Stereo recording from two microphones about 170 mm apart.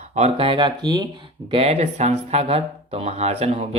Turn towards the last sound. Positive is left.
turn(degrees=-40)  # may be behind; listen again after turning